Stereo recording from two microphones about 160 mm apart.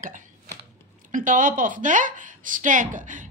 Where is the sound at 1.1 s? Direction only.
55° right (ahead or behind).